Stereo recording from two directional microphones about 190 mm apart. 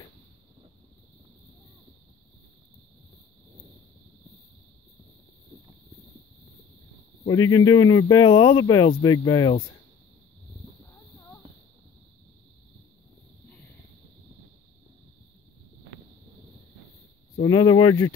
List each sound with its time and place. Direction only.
7.2 s speech: 20° left (ahead or behind)
17.4 s speech: 20° left (ahead or behind)